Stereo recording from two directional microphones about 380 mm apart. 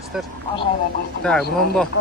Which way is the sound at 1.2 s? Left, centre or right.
Centre.